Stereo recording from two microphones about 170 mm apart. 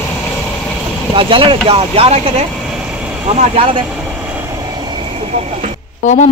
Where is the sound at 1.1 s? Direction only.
30° right (ahead or behind).